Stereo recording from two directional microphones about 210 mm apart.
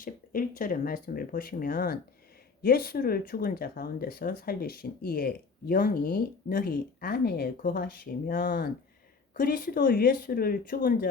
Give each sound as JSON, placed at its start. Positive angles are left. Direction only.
{"t": 0.0, "sound": "speech", "side_deg": 40}